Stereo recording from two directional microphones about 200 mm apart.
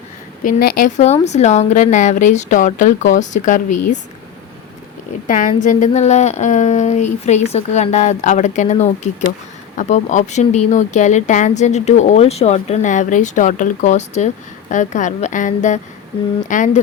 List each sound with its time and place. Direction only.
0.4 s speech: 40° left (ahead or behind)
5.3 s speech: 40° left (ahead or behind)